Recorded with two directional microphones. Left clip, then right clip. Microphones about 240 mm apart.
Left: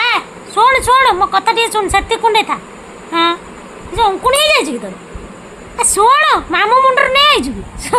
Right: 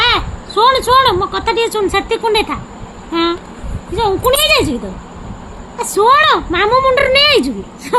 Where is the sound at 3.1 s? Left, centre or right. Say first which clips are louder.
Left 3 dB; centre.